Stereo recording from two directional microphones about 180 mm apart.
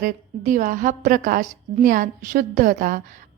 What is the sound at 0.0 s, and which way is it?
A woman's voice, 45° right (ahead or behind).